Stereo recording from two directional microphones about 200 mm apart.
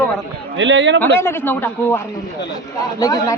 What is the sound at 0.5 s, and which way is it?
Speech, 65° right (ahead or behind).